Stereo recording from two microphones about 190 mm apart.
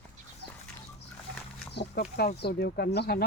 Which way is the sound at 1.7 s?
60° left (ahead or behind).